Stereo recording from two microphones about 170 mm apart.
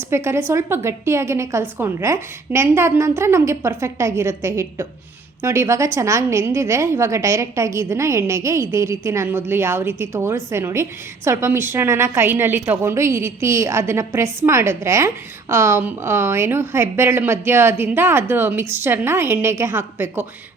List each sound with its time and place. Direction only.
0.1 s a woman's voice: 15° right (ahead or behind)